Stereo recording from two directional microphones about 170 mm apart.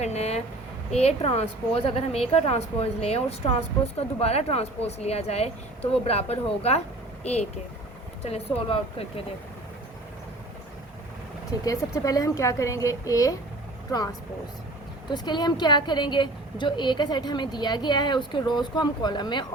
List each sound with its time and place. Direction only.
0.0 s speech: 40° left (ahead or behind)
8.2 s speech: 35° left (ahead or behind)
11.6 s a woman's voice: 20° left (ahead or behind)
15.1 s a woman's voice: 25° left (ahead or behind)